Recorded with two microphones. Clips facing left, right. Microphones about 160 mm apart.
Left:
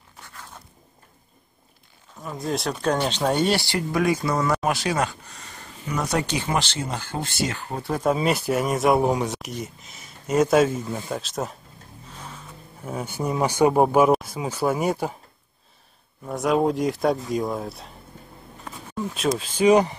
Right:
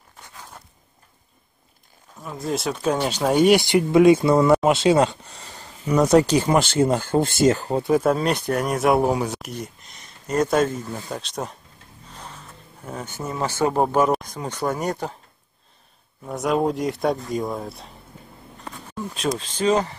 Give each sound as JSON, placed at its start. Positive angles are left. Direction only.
{"t": 2.1, "sound": "speech", "side_deg": 0}
{"t": 7.9, "sound": "speech", "side_deg": 0}
{"t": 16.3, "sound": "speech", "side_deg": 0}